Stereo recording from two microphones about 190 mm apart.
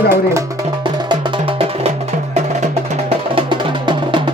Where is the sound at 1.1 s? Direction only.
30° right (ahead or behind).